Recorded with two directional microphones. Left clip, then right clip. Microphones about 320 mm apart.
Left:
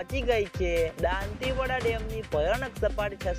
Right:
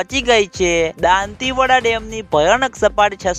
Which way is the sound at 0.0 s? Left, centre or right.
Right.